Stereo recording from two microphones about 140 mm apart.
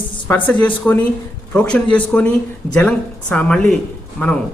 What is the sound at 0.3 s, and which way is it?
Speech, 10° left (ahead or behind).